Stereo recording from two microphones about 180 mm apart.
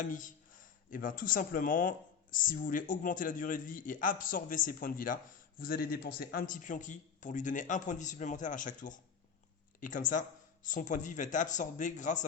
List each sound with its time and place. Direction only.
0.0 s a man's voice: 45° left (ahead or behind)